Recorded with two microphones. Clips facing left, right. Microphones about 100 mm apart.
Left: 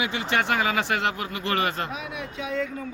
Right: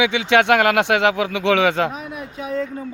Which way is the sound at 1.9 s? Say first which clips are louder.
Right 3 dB; 40° right (ahead or behind).